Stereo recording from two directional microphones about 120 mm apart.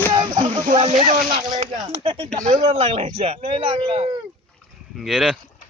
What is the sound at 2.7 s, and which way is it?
Speech, 60° right (ahead or behind).